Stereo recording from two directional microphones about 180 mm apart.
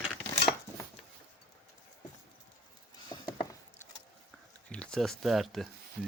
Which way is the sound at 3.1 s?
20° left (ahead or behind).